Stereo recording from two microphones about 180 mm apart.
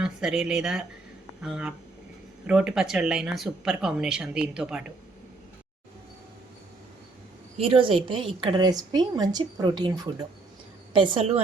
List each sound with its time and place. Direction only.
0.0 s speech: 5° right (ahead or behind)
7.5 s a woman's voice: 30° right (ahead or behind)